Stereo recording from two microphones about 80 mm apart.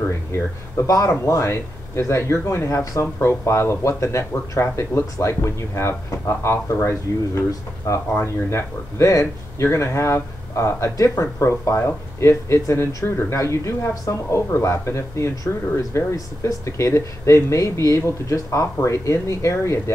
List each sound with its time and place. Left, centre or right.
0.7 s speech: left